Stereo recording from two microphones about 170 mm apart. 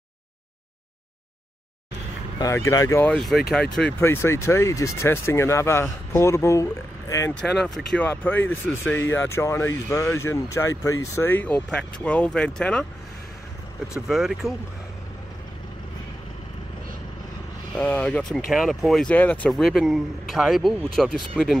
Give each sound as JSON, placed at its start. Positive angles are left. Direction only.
{"t": 2.3, "sound": "speech", "side_deg": 20}
{"t": 3.1, "sound": "speech", "side_deg": 0}
{"t": 4.0, "sound": "speech", "side_deg": 15}
{"t": 7.4, "sound": "speech", "side_deg": 0}
{"t": 14.0, "sound": "speech", "side_deg": 0}
{"t": 17.7, "sound": "speech", "side_deg": 10}